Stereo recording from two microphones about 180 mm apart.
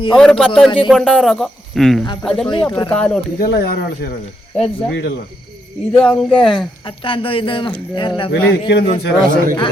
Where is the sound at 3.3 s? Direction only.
60° left (ahead or behind).